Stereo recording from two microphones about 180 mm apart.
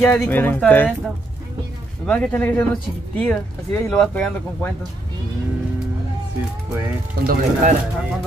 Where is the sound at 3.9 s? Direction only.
5° left (ahead or behind).